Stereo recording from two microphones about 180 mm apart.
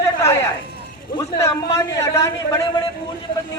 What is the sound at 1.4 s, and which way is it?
A man's voice, 15° left (ahead or behind).